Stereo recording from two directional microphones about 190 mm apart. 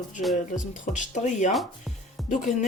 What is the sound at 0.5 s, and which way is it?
Speech, 40° left (ahead or behind).